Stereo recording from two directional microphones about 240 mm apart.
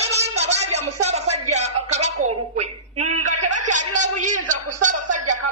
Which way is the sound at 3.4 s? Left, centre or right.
Right.